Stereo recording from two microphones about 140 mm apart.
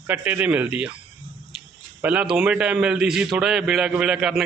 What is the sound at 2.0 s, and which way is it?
A man's voice, 10° right (ahead or behind).